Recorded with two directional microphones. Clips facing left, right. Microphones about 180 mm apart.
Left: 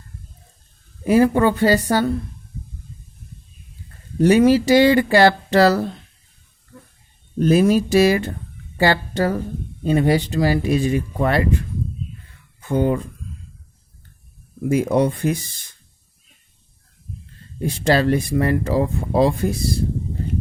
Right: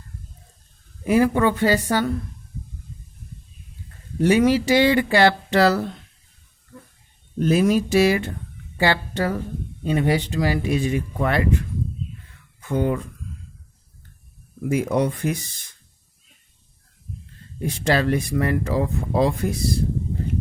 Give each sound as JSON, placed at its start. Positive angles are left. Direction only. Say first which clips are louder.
{"t": 1.0, "sound": "speech", "louder": "left 3 dB", "side_deg": 35}
{"t": 4.2, "sound": "speech", "louder": "left 4 dB", "side_deg": 40}
{"t": 7.3, "sound": "speech", "louder": "left 3 dB", "side_deg": 40}
{"t": 12.5, "sound": "speech", "louder": "left 3 dB", "side_deg": 30}
{"t": 14.6, "sound": "speech", "louder": "left 3 dB", "side_deg": 30}
{"t": 17.6, "sound": "speech", "louder": "left 3 dB", "side_deg": 30}